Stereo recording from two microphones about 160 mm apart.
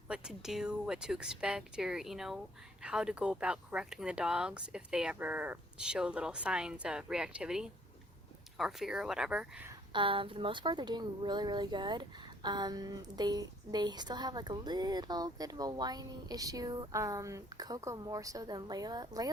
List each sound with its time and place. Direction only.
0.1 s speech: 5° right (ahead or behind)
9.9 s speech: 30° right (ahead or behind)